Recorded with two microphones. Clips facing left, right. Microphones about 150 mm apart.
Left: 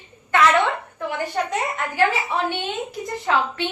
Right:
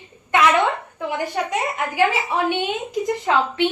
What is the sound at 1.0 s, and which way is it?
A woman's voice, 15° right (ahead or behind).